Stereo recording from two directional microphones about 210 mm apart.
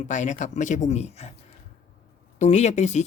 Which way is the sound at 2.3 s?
30° left (ahead or behind).